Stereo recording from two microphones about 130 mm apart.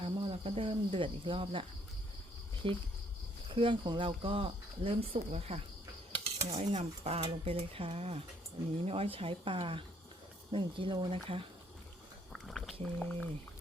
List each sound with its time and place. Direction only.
0.0 s cricket: 45° right (ahead or behind)
2.6 s speech: 40° right (ahead or behind)
6.1 s stir: 40° right (ahead or behind)
6.5 s speech: 55° right (ahead or behind)
12.3 s a sound: centre (ahead or behind)
12.8 s speech: 5° left (ahead or behind)